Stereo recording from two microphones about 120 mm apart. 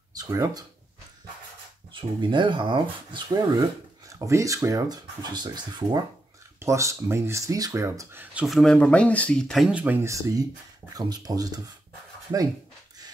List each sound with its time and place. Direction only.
0.1 s speech: 30° right (ahead or behind)
1.9 s speech: 45° right (ahead or behind)
3.3 s speech: 30° right (ahead or behind)
6.6 s speech: 25° right (ahead or behind)
8.5 s speech: 5° left (ahead or behind)
9.8 s speech: 15° right (ahead or behind); by 11.6 s 35° right (ahead or behind)